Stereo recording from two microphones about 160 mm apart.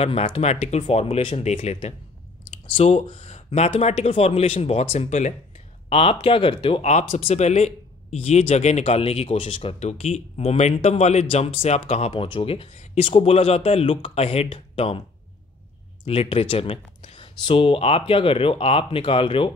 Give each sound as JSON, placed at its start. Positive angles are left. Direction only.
{"t": 0.0, "sound": "speech", "side_deg": 40}
{"t": 16.1, "sound": "speech", "side_deg": 35}